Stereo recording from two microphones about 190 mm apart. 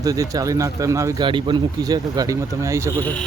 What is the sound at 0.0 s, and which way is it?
Speech, 20° right (ahead or behind).